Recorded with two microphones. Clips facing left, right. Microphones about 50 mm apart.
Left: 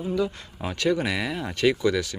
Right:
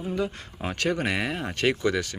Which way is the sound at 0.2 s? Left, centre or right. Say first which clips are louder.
Left 2 dB; right.